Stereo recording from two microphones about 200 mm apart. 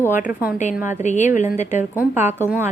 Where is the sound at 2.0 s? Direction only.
10° right (ahead or behind).